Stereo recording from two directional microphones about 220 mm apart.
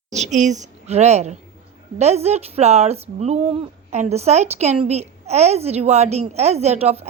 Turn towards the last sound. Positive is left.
turn(degrees=-30)  # may be behind; listen again after turning